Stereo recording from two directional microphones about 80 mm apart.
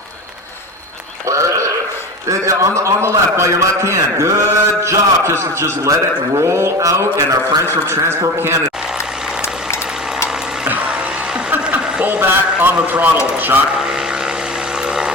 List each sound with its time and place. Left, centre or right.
1.3 s horse: right
2.2 s a man's voice: right
6.4 s mantra: right
8.4 s a man's voice: right
10.7 s music: right
11.6 s a man's voice: centre
13.7 s vehicle: centre